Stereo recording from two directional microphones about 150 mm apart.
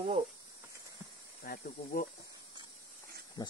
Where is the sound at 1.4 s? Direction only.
90° left.